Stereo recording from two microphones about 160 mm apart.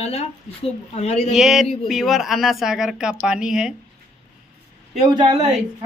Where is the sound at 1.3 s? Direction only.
Centre (ahead or behind).